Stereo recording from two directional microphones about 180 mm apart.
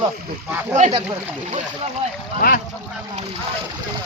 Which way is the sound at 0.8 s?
35° right (ahead or behind).